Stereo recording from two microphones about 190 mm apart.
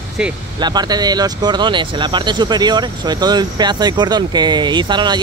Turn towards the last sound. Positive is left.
turn(degrees=-25)  # may be behind; listen again after turning